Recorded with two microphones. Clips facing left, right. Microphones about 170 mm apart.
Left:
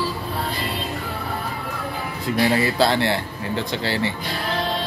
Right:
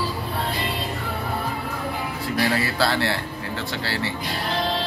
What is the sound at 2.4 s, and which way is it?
Speech, 20° left (ahead or behind).